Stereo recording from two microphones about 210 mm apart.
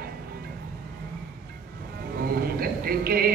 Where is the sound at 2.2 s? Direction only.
45° right (ahead or behind).